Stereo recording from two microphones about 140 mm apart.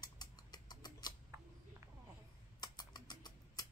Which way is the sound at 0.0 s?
30° left (ahead or behind).